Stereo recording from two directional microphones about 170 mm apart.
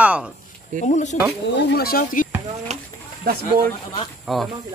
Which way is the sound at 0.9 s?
45° left (ahead or behind).